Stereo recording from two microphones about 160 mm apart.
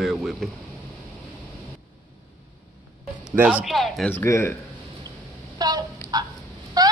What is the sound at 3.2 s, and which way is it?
Speech, 10° right (ahead or behind).